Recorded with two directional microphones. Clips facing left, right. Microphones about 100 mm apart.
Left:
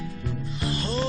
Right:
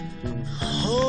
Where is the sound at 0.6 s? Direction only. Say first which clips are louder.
Right 4 dB; 25° right (ahead or behind).